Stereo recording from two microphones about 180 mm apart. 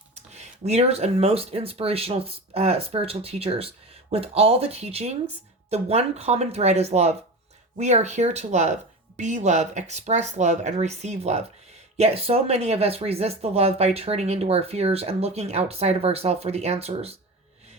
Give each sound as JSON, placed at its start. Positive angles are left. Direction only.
{"t": 0.1, "sound": "speech", "side_deg": -40}